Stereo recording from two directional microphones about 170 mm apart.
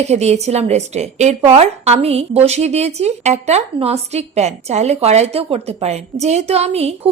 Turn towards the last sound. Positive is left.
turn(degrees=-40)  # may be behind; listen again after turning